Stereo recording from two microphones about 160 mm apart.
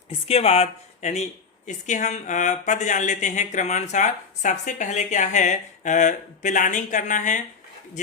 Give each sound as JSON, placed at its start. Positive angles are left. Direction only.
{"t": 0.1, "sound": "speech", "side_deg": 40}